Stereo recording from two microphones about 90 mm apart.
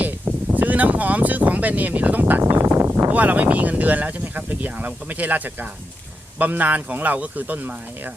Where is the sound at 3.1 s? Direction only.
20° right (ahead or behind).